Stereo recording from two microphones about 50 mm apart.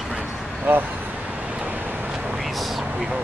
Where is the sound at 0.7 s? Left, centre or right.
Right.